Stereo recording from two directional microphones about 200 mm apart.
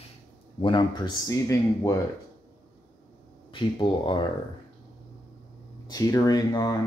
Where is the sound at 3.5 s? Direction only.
25° left (ahead or behind).